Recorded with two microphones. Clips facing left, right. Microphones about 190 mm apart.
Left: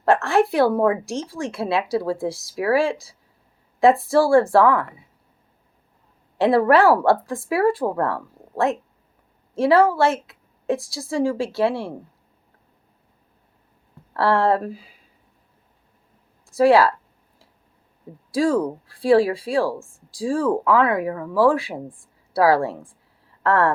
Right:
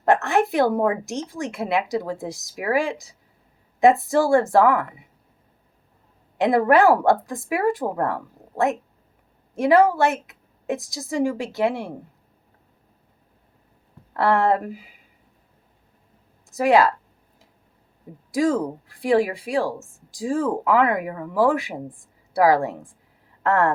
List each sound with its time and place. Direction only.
0.1 s a woman's voice: 20° right (ahead or behind)
6.3 s a woman's voice: 15° right (ahead or behind)
14.1 s a woman's voice: 20° right (ahead or behind)
16.5 s speech: 20° right (ahead or behind)
18.3 s a woman's voice: 20° right (ahead or behind)